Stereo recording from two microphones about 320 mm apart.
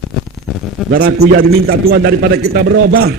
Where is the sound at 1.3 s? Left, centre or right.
Right.